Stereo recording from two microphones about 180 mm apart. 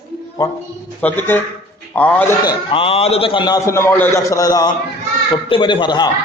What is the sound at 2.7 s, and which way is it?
A man's voice, 30° left (ahead or behind).